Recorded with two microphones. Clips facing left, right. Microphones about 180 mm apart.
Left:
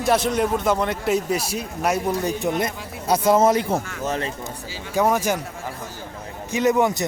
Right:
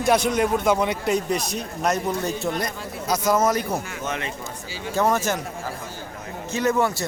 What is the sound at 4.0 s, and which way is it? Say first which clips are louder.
Speech: left 3 dB; 35° left (ahead or behind).